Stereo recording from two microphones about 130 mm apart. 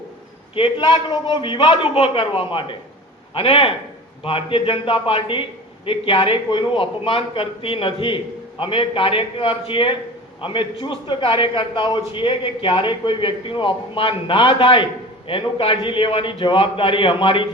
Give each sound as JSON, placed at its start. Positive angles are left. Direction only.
{"t": 0.5, "sound": "a man's voice", "side_deg": 40}